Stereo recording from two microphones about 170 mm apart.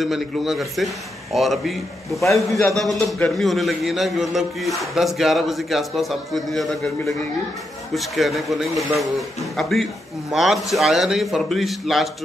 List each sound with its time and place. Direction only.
0.0 s a man's voice: centre (ahead or behind)
2.2 s a man's voice: 15° left (ahead or behind)
2.7 s a man's voice: centre (ahead or behind)